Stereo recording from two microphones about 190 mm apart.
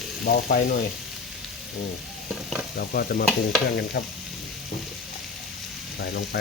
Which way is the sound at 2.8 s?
55° left (ahead or behind).